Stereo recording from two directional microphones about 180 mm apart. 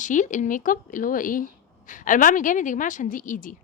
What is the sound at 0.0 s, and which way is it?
A woman's voice, 45° left (ahead or behind).